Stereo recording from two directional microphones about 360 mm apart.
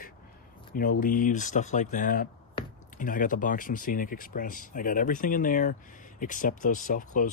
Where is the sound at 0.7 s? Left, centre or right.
Left.